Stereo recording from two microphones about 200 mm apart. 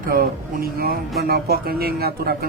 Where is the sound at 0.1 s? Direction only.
50° right (ahead or behind).